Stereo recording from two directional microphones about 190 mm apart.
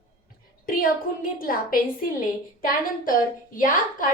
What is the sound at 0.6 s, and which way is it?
A woman's voice, 50° left (ahead or behind).